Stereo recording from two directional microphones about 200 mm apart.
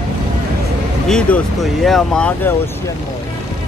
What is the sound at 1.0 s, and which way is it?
Speech, 5° left (ahead or behind).